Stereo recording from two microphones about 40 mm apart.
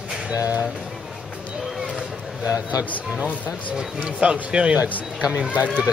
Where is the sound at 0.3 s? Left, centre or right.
Right.